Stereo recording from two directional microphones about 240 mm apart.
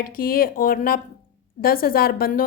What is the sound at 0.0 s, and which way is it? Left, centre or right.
A woman's voice, left.